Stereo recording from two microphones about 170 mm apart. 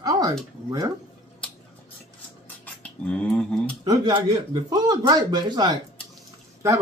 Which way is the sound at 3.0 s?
5° left (ahead or behind).